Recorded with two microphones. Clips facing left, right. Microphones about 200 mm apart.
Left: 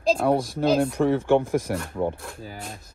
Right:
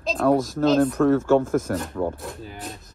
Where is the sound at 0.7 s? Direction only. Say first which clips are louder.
Right 4 dB; 10° left (ahead or behind).